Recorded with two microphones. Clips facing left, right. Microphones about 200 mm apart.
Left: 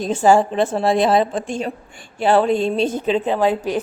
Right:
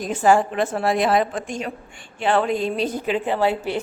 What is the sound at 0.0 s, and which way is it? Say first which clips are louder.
A woman's voice: left 3 dB; 25° left (ahead or behind).